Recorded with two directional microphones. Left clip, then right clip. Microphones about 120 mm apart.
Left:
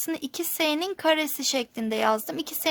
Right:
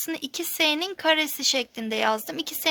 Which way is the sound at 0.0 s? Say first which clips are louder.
Even; 55° left (ahead or behind).